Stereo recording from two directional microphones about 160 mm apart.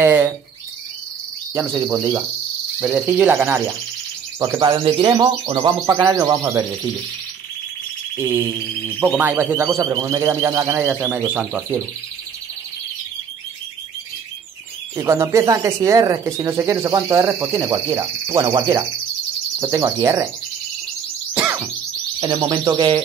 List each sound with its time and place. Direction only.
0.0 s bird: 15° right (ahead or behind)
1.5 s speech: 20° right (ahead or behind)
2.8 s speech: 10° right (ahead or behind)
4.6 s speech: 30° right (ahead or behind)
8.8 s speech: 10° right (ahead or behind)
15.0 s speech: 20° right (ahead or behind)
21.3 s chirp: 15° right (ahead or behind)
22.2 s speech: 25° right (ahead or behind)